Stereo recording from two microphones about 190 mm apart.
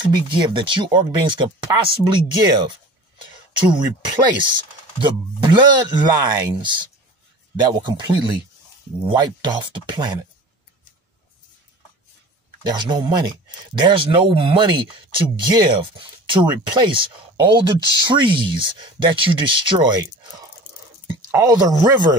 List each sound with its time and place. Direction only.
0.0 s speech: 25° right (ahead or behind)
12.6 s speech: 20° right (ahead or behind)
21.3 s speech: 20° right (ahead or behind)